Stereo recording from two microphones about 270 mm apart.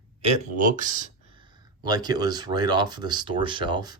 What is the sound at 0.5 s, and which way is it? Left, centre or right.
Speech, right.